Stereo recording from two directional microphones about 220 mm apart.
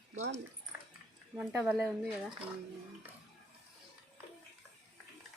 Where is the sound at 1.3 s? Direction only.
10° right (ahead or behind).